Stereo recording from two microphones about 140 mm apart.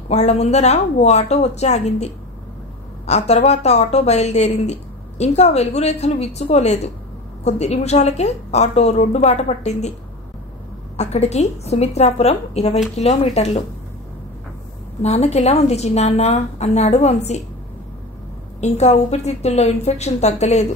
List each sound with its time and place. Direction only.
0.1 s a woman's voice: 55° left (ahead or behind)
11.0 s a woman's voice: 50° left (ahead or behind)
15.0 s a woman's voice: 50° left (ahead or behind)
18.6 s a woman's voice: 50° left (ahead or behind)